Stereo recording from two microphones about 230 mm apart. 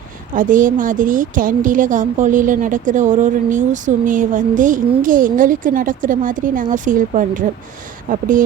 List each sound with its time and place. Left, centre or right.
0.3 s a woman's voice: right